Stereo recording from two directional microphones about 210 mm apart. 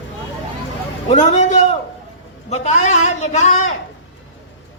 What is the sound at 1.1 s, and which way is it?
A man's voice, 35° left (ahead or behind).